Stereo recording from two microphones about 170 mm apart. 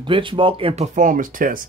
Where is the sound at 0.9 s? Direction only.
50° right (ahead or behind).